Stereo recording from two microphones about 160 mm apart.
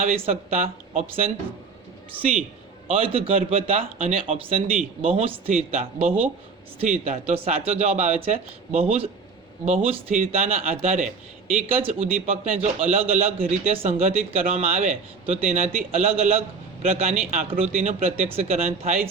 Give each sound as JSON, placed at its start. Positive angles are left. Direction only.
{"t": 0.0, "sound": "a man's voice", "side_deg": -40}
{"t": 2.8, "sound": "a man's voice", "side_deg": -35}